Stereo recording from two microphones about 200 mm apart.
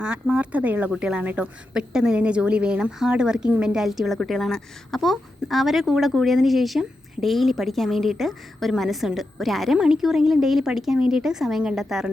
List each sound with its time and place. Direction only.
0.0 s a woman's voice: 5° right (ahead or behind)